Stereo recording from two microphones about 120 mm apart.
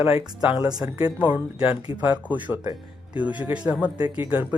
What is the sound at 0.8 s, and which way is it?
Speech, 15° right (ahead or behind).